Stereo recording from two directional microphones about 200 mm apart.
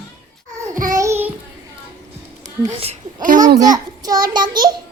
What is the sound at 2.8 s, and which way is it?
Speech, 35° right (ahead or behind).